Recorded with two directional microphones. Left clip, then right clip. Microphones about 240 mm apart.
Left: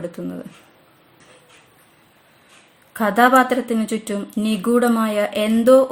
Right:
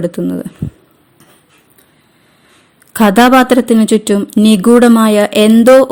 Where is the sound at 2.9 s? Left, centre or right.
Right.